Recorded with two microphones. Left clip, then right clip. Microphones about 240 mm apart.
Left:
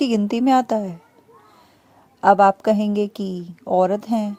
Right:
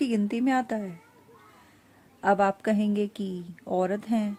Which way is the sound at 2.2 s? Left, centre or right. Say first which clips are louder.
Left 10 dB; centre.